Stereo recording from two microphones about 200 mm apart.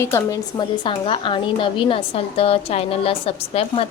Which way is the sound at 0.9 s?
25° left (ahead or behind).